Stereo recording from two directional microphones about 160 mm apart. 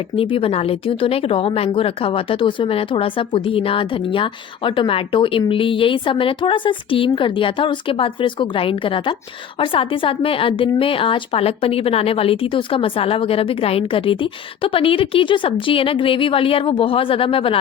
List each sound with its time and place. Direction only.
0.2 s a woman's voice: 35° left (ahead or behind)